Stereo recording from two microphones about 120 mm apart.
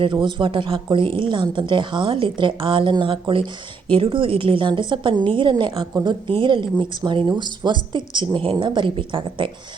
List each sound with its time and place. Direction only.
0.0 s a woman's voice: 45° right (ahead or behind)